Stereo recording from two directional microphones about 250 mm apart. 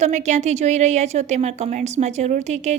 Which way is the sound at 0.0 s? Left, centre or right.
Right.